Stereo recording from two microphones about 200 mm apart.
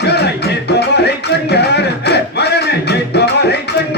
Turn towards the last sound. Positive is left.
turn(degrees=55)  # may be behind; listen again after turning